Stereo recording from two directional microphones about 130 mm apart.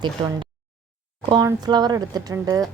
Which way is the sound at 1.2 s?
30° right (ahead or behind).